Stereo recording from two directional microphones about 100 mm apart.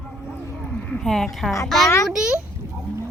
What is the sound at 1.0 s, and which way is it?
Speech, 5° left (ahead or behind).